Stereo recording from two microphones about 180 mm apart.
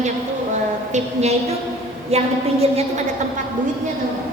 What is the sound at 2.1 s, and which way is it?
Speech, 35° right (ahead or behind).